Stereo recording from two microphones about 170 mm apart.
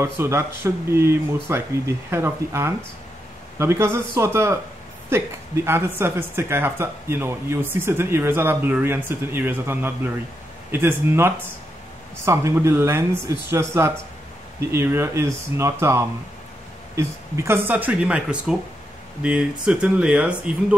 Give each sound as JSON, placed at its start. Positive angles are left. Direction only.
{"t": 0.0, "sound": "speech", "side_deg": -15}
{"t": 19.6, "sound": "speech", "side_deg": -5}